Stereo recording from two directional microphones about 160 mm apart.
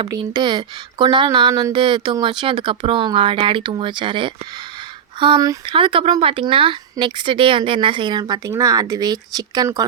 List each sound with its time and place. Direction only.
0.1 s speech: 30° right (ahead or behind)